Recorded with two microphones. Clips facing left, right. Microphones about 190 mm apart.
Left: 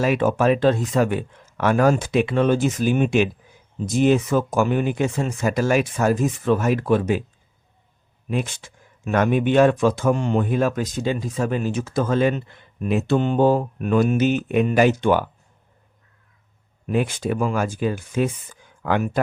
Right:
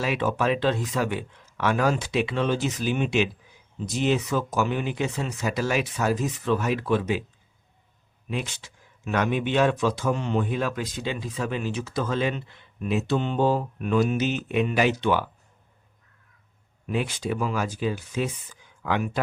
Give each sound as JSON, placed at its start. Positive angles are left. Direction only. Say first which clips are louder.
{"t": 0.0, "sound": "speech", "louder": "left 6 dB", "side_deg": 50}
{"t": 8.3, "sound": "speech", "louder": "left 6 dB", "side_deg": 50}
{"t": 16.9, "sound": "speech", "louder": "left 5 dB", "side_deg": 50}